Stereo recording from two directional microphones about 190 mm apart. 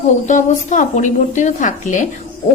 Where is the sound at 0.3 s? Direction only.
40° left (ahead or behind).